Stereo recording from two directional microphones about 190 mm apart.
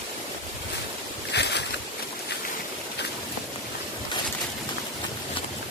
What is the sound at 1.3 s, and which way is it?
Boat, 65° left (ahead or behind).